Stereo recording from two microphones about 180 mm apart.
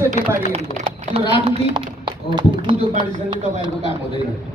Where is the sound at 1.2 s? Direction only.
35° right (ahead or behind).